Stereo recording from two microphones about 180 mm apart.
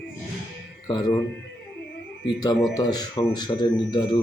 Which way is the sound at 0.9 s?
25° left (ahead or behind).